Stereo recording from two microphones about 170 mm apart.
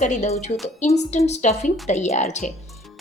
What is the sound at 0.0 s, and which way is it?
A woman's voice, 45° left (ahead or behind).